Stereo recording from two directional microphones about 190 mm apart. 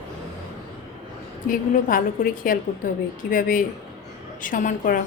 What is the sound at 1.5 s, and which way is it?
A woman's voice, 45° left (ahead or behind).